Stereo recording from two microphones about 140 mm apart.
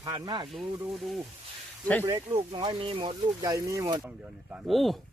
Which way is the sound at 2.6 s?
40° right (ahead or behind).